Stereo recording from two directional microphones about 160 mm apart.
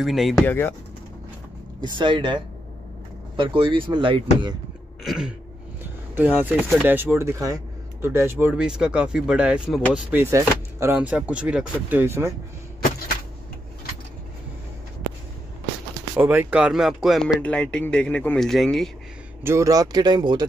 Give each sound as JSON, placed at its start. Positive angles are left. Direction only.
{"t": 0.0, "sound": "speech", "side_deg": 0}
{"t": 0.4, "sound": "speech", "side_deg": 10}
{"t": 1.8, "sound": "speech", "side_deg": -30}
{"t": 5.0, "sound": "speech", "side_deg": -5}
{"t": 16.2, "sound": "speech", "side_deg": -10}
{"t": 19.4, "sound": "speech", "side_deg": -20}